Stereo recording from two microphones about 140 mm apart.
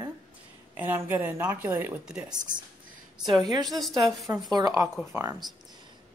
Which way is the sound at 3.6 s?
Centre (ahead or behind).